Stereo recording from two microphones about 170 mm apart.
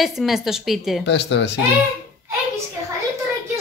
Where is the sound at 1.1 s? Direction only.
90° left.